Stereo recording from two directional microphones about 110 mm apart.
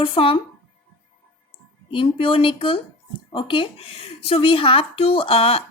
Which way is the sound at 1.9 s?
50° left (ahead or behind).